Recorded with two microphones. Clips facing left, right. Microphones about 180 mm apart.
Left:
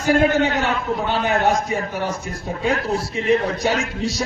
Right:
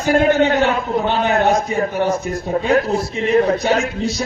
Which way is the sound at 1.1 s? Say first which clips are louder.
Right 2 dB; 45° right (ahead or behind).